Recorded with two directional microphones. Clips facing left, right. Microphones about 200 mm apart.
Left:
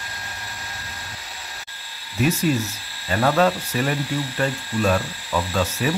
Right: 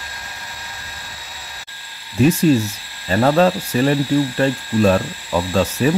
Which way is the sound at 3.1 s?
35° right (ahead or behind).